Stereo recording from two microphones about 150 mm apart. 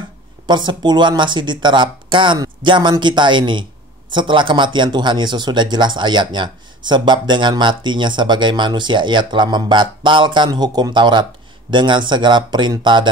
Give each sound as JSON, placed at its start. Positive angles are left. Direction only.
{"t": 0.5, "sound": "speech", "side_deg": -30}